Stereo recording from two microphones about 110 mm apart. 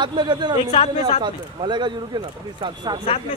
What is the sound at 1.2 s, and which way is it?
Speech, 45° right (ahead or behind).